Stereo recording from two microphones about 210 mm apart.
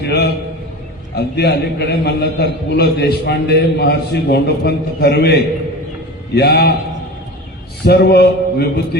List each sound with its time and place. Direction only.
0.0 s a man's voice: 50° left (ahead or behind)
7.9 s a man's voice: 50° left (ahead or behind)